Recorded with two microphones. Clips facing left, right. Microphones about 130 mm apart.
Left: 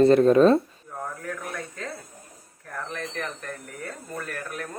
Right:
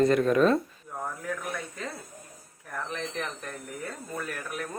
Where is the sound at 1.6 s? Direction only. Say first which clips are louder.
Left 2 dB; centre (ahead or behind).